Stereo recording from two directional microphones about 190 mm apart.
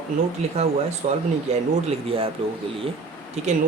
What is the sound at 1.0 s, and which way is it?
Speech, 40° right (ahead or behind).